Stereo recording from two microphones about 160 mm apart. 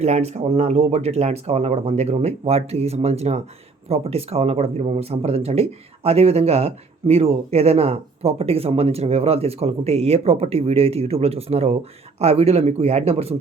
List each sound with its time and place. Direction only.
0.0 s speech: 40° right (ahead or behind)